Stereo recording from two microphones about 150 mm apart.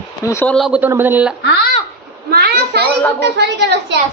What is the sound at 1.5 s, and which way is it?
Speech, 90° left.